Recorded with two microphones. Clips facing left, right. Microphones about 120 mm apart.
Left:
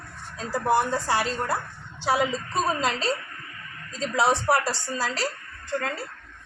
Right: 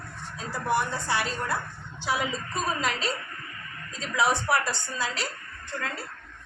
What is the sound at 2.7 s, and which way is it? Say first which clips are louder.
A woman's voice: left 3 dB; 30° left (ahead or behind).